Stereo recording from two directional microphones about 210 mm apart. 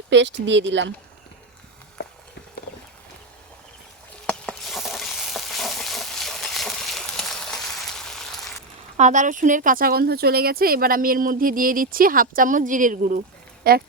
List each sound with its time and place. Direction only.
0.1 s speech: 55° right (ahead or behind)
4.3 s stir: 5° left (ahead or behind)
9.0 s speech: 35° right (ahead or behind)